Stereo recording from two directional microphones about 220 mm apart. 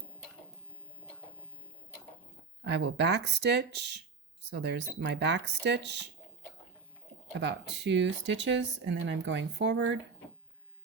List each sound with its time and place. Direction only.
2.6 s speech: 50° right (ahead or behind)
7.3 s speech: 55° right (ahead or behind)